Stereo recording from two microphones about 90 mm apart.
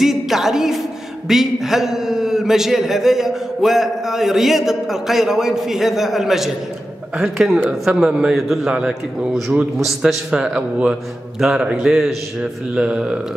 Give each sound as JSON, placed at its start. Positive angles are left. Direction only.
{"t": 0.0, "sound": "a man's voice", "side_deg": -5}